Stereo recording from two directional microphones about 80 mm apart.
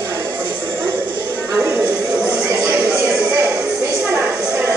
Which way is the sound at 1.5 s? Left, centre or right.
Centre.